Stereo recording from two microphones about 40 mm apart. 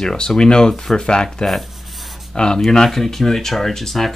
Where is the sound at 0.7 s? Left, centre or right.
Centre.